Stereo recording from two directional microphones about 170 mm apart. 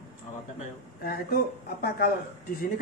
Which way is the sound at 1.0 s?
65° left (ahead or behind).